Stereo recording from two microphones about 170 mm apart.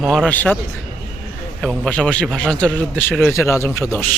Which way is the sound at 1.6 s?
5° left (ahead or behind).